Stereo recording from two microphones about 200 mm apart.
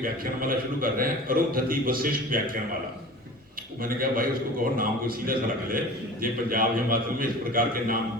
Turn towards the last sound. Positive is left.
turn(degrees=-45)  # may be behind; listen again after turning